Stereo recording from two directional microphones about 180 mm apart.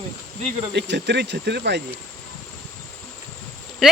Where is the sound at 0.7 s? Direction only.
75° right (ahead or behind).